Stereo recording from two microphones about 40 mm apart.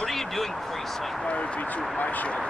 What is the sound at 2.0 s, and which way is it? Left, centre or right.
Speech, left.